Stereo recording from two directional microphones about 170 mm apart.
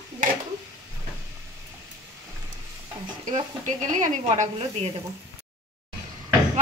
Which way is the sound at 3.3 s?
45° right (ahead or behind).